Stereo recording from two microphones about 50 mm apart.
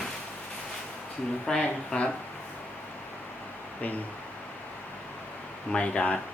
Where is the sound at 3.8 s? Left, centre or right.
Left.